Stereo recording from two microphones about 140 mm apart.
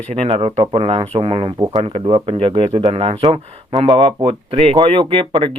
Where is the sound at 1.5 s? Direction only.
30° right (ahead or behind).